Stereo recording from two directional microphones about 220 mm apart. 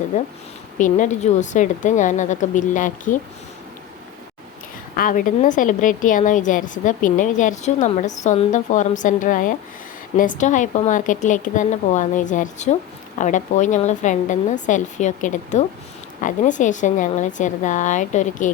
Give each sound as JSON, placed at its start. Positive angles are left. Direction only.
{"t": 0.8, "sound": "a woman's voice", "side_deg": 35}
{"t": 4.9, "sound": "a woman's voice", "side_deg": 40}